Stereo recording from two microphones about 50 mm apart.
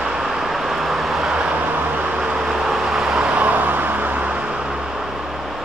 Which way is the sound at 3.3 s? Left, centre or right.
Right.